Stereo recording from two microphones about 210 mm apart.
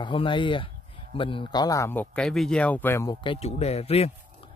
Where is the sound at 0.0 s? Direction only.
25° left (ahead or behind).